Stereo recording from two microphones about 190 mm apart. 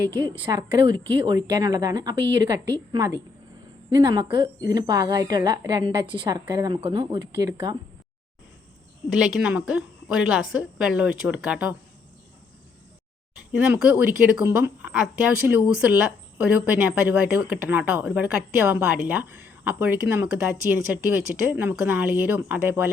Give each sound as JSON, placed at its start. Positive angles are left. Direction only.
{"t": 0.1, "sound": "a woman's voice", "side_deg": -25}
{"t": 9.1, "sound": "a woman's voice", "side_deg": -5}
{"t": 13.7, "sound": "a woman's voice", "side_deg": -5}
{"t": 16.4, "sound": "speech", "side_deg": -10}